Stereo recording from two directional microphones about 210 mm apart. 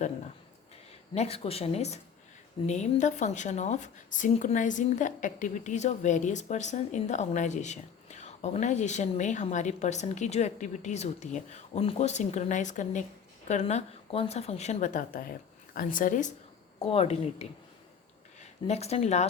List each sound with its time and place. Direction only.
1.1 s a woman's voice: 30° left (ahead or behind)
16.8 s speech: 30° left (ahead or behind)
18.7 s a woman's voice: 30° left (ahead or behind)